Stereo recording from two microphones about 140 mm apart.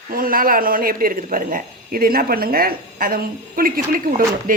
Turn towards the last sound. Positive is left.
turn(degrees=-90)